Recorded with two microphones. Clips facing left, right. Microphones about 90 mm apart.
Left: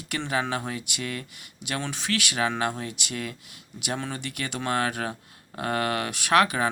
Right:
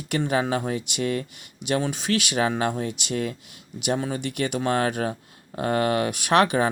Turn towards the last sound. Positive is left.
turn(degrees=-30)  # may be behind; listen again after turning